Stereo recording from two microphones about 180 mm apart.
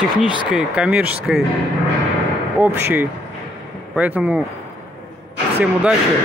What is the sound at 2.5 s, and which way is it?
Speech, 10° right (ahead or behind).